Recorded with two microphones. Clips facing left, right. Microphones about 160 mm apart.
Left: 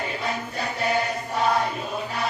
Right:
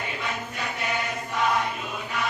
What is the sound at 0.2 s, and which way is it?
Music, 35° left (ahead or behind).